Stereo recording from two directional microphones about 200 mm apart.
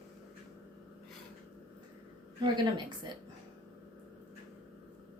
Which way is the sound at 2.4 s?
20° right (ahead or behind).